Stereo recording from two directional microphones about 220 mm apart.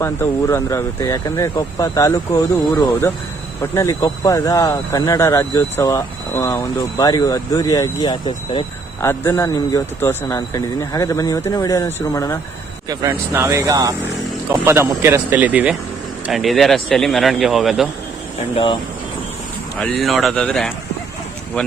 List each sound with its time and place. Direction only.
0.0 s speech: 10° left (ahead or behind)
12.9 s speech: 15° right (ahead or behind)
18.5 s speech: 20° left (ahead or behind)
19.8 s speech: centre (ahead or behind)